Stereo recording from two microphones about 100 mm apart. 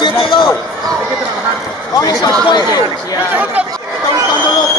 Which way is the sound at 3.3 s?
15° right (ahead or behind).